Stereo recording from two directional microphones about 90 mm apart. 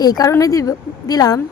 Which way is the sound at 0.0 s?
45° left (ahead or behind).